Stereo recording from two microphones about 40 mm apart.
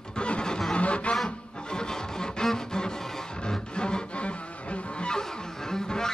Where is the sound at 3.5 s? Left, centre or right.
Left.